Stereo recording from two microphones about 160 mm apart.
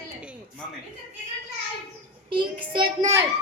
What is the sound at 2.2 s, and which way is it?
Speech, 30° right (ahead or behind).